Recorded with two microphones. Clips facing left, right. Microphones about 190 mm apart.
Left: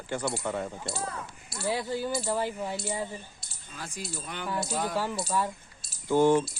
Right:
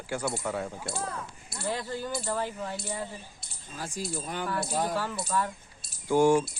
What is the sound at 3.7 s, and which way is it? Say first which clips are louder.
Speech: right 4 dB; 40° right (ahead or behind).